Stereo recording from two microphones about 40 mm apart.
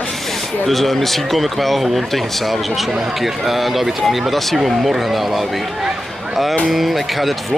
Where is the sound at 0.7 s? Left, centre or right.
Centre.